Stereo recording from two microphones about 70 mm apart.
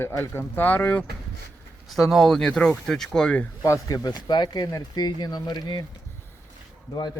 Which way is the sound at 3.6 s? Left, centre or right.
Left.